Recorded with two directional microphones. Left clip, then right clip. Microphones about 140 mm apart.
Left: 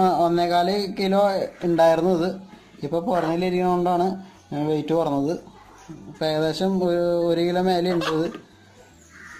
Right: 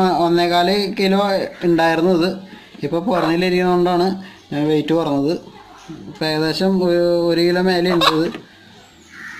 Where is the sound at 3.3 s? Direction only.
30° left (ahead or behind).